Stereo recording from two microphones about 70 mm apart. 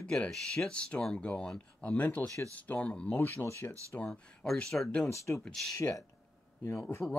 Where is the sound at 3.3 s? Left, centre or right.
Left.